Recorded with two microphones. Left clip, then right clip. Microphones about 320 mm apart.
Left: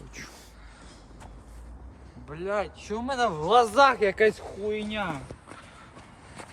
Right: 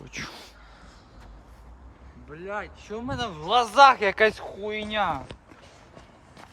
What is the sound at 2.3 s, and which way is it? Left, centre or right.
Speech, left.